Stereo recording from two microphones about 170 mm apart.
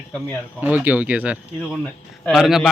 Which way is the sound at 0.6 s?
10° right (ahead or behind).